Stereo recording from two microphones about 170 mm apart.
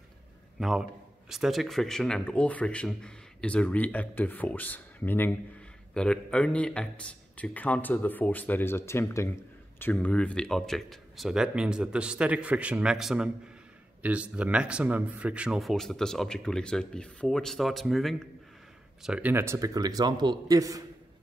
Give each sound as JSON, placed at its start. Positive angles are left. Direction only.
{"t": 0.6, "sound": "a man's voice", "side_deg": 0}